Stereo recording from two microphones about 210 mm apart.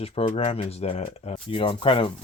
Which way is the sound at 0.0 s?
30° left (ahead or behind).